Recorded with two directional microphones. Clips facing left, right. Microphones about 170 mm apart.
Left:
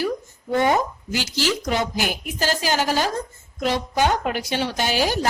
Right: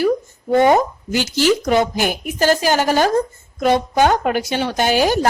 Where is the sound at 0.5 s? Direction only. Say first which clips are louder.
Right 6 dB; 55° right (ahead or behind).